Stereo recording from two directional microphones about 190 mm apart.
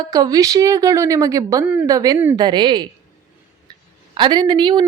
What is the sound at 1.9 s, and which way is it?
Speech, 20° right (ahead or behind).